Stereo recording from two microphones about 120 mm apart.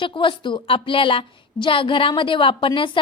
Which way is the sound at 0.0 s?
45° left (ahead or behind).